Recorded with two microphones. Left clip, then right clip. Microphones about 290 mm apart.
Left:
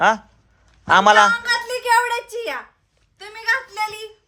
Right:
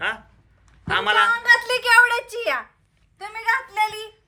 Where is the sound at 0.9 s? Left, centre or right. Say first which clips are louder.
Left 7 dB; centre.